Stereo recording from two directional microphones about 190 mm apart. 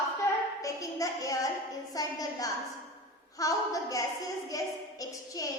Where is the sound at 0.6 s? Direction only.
15° left (ahead or behind).